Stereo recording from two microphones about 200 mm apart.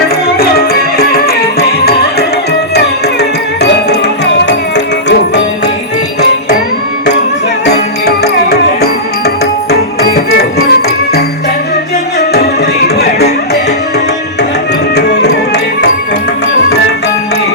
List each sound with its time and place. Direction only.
0.3 s music: 50° left (ahead or behind)
7.6 s music: 55° left (ahead or behind)
13.0 s music: 55° left (ahead or behind)
14.9 s music: 55° left (ahead or behind)